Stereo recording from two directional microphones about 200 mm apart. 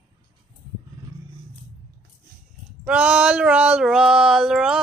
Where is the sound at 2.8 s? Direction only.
5° right (ahead or behind).